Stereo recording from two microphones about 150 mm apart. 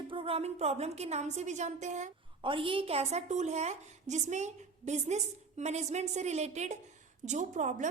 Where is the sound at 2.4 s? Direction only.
35° right (ahead or behind).